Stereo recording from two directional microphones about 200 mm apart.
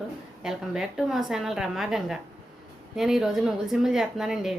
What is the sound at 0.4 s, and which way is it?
Speech, centre (ahead or behind).